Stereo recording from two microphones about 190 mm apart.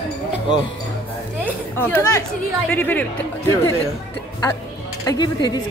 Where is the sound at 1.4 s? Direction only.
10° left (ahead or behind).